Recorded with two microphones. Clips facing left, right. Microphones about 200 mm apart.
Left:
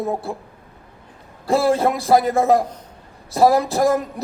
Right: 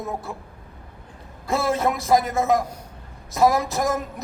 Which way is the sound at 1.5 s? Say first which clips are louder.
Left 5 dB; 35° left (ahead or behind).